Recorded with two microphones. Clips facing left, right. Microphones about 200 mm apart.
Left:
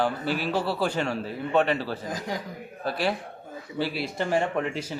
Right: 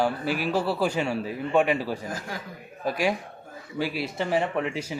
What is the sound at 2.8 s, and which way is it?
A man's voice, 10° right (ahead or behind).